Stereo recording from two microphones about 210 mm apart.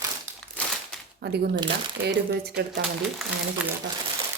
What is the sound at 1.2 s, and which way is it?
A woman's voice, 50° right (ahead or behind).